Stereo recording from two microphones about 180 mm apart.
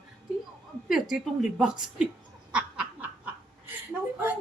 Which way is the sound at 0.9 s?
Centre (ahead or behind).